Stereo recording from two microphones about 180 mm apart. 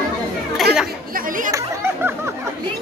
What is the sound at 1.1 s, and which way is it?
Chatter, 50° right (ahead or behind).